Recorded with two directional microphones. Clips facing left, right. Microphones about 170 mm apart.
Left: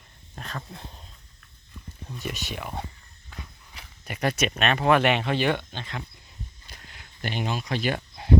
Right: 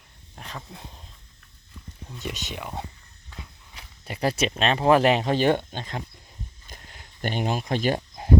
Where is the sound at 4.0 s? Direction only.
30° right (ahead or behind).